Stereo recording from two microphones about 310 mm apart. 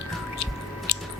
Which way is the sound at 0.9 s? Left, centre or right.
Left.